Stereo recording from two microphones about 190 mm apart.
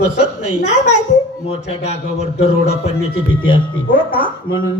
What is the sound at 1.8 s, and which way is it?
A man's voice, 35° left (ahead or behind).